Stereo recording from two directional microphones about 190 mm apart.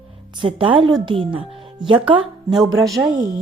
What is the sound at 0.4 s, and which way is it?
Speech, 30° right (ahead or behind).